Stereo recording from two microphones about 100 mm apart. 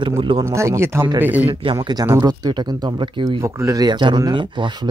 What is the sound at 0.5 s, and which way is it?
Speech, 30° right (ahead or behind).